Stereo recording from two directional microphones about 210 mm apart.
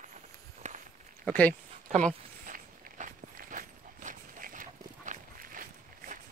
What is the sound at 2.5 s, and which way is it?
Walk, 40° right (ahead or behind).